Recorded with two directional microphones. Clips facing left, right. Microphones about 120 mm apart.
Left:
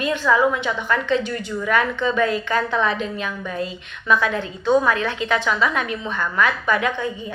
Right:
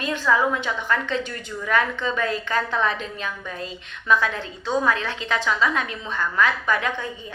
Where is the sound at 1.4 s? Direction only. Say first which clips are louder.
Even; 35° right (ahead or behind).